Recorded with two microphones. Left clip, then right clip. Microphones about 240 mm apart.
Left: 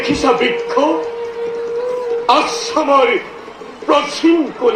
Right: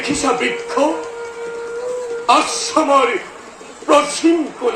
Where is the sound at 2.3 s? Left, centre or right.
Right.